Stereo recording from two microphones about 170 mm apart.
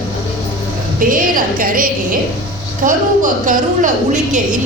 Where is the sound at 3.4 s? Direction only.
50° right (ahead or behind).